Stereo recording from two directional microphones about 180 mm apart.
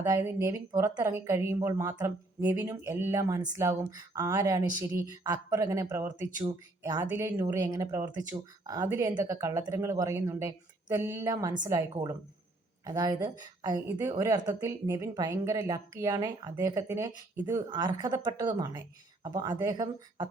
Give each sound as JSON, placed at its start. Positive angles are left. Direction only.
{"t": 0.0, "sound": "speech", "side_deg": -15}
{"t": 17.7, "sound": "speech", "side_deg": -25}